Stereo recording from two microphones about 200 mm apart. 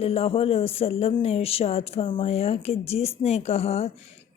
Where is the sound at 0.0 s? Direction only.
30° left (ahead or behind).